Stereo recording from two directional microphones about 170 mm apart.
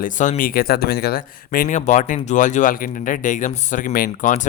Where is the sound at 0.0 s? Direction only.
50° left (ahead or behind).